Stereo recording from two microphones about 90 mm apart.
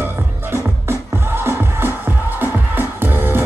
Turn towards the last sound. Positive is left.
turn(degrees=-25)  # may be behind; listen again after turning